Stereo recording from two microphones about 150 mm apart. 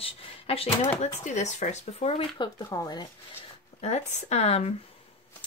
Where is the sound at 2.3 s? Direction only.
25° left (ahead or behind).